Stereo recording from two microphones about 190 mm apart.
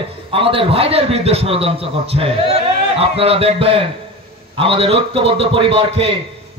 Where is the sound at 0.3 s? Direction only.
30° right (ahead or behind).